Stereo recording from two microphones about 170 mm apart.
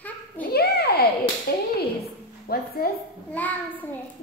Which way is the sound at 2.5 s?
60° left (ahead or behind).